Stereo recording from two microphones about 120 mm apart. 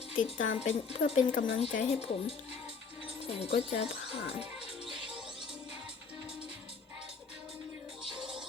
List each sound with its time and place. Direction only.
0.2 s speech: 85° left; by 3.8 s 60° left (ahead or behind)